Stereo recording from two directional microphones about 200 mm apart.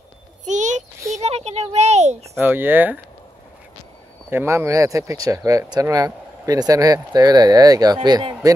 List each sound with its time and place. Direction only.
0.5 s child singing: 35° right (ahead or behind)
1.1 s a sound: 35° right (ahead or behind)
2.3 s speech: 10° right (ahead or behind)
4.3 s speech: 10° right (ahead or behind)